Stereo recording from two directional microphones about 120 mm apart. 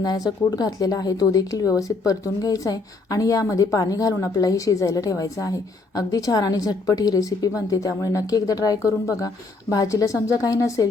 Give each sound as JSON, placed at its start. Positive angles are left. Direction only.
{"t": 0.0, "sound": "speech", "side_deg": 35}